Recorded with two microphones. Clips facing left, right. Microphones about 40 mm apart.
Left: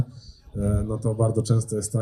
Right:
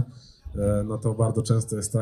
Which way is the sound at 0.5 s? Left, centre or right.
Right.